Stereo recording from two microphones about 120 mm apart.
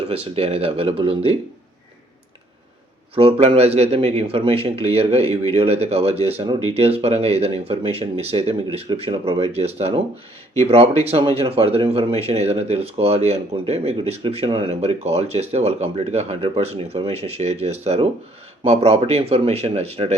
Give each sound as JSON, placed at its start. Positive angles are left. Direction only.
{"t": 0.0, "sound": "speech", "side_deg": -55}
{"t": 3.2, "sound": "speech", "side_deg": -55}